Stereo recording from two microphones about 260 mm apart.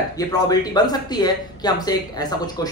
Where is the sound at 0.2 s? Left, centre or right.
Centre.